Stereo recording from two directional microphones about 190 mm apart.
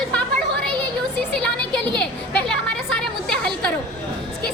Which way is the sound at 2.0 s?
5° left (ahead or behind).